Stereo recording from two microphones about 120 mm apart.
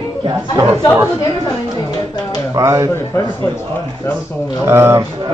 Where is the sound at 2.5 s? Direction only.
25° right (ahead or behind).